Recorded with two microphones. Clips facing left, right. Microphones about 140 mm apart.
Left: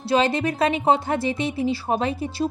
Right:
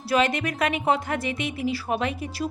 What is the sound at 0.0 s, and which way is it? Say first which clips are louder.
A woman's voice: left 3 dB; 30° left (ahead or behind).